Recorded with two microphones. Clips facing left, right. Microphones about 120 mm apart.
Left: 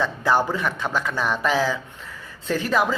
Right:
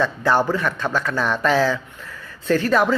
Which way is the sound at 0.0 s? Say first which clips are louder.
Right 2 dB; 15° left (ahead or behind).